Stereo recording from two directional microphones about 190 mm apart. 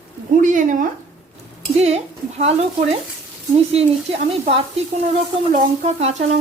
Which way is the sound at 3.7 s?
30° right (ahead or behind).